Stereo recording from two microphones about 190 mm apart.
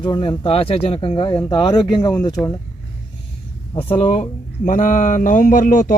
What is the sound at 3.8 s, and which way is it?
Speech, 30° left (ahead or behind).